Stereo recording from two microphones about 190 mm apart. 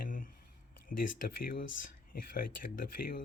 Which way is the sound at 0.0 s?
45° left (ahead or behind).